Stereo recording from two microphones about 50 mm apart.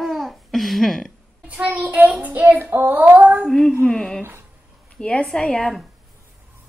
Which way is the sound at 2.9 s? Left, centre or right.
Right.